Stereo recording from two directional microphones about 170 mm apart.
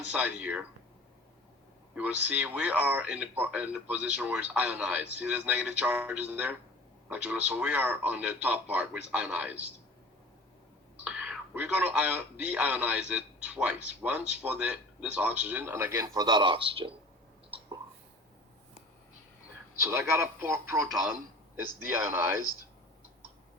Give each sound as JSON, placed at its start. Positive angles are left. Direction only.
{"t": 0.1, "sound": "a man's voice", "side_deg": -5}
{"t": 2.0, "sound": "a man's voice", "side_deg": -5}
{"t": 11.0, "sound": "a man's voice", "side_deg": -5}
{"t": 19.8, "sound": "a man's voice", "side_deg": -15}
{"t": 20.9, "sound": "a man's voice", "side_deg": -5}